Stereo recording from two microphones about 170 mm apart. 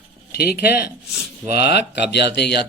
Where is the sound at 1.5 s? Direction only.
75° left (ahead or behind).